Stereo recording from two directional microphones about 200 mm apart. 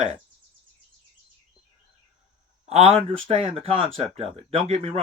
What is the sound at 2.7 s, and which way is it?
Speech, 30° right (ahead or behind).